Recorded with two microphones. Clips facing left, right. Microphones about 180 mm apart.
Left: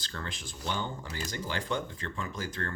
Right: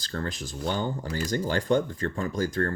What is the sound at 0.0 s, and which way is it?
Speech, 40° right (ahead or behind).